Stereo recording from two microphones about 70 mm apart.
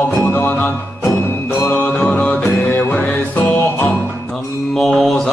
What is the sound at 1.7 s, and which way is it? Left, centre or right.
Music, left.